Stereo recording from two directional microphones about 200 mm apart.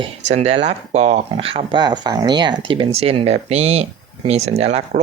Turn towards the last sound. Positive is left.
turn(degrees=-30)  # may be behind; listen again after turning